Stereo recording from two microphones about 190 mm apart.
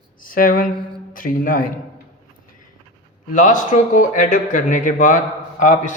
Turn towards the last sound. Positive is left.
turn(degrees=45)  # may be behind; listen again after turning